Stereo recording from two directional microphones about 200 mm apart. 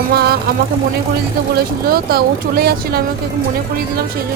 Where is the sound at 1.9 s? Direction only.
50° right (ahead or behind).